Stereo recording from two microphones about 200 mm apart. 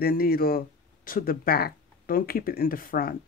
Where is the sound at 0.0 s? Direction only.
50° left (ahead or behind).